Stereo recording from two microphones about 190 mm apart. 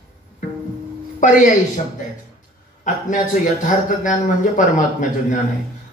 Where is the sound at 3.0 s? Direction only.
40° left (ahead or behind).